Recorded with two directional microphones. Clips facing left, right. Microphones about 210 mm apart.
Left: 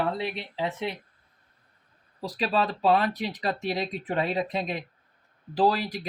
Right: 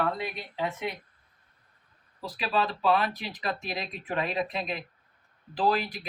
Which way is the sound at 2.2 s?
35° left (ahead or behind).